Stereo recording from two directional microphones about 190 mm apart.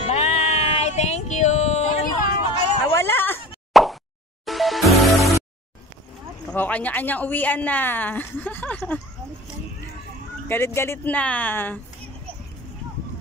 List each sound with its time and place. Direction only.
0.0 s a sound: 35° left (ahead or behind)
2.9 s a sound: 10° left (ahead or behind)
3.8 s plop: centre (ahead or behind)
4.5 s music: centre (ahead or behind)
6.5 s a woman's voice: 10° left (ahead or behind)
10.5 s a woman's voice: 15° left (ahead or behind)